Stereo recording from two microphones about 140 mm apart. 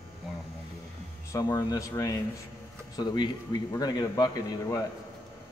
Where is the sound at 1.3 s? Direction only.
25° left (ahead or behind).